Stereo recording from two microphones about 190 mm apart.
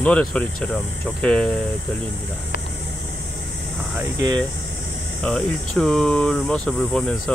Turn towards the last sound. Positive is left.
turn(degrees=5)  # may be behind; listen again after turning